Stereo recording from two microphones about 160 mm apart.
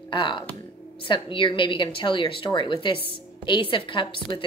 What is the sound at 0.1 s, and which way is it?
A woman's voice, 30° left (ahead or behind).